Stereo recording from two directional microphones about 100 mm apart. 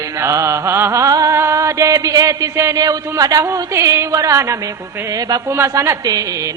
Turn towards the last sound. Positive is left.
turn(degrees=-40)  # may be behind; listen again after turning